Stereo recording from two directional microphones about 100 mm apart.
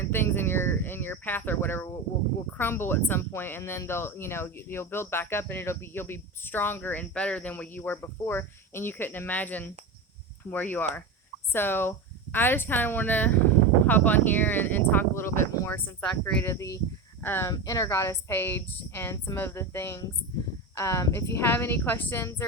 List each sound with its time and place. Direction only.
0.0 s a sound: 20° left (ahead or behind)
2.5 s speech: 20° left (ahead or behind)
16.4 s speech: 30° left (ahead or behind)
17.5 s speech: 35° left (ahead or behind)